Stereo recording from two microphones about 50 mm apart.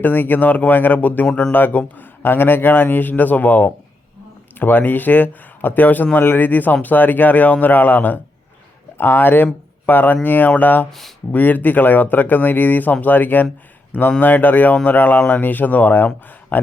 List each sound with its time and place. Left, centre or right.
0.0 s speech: left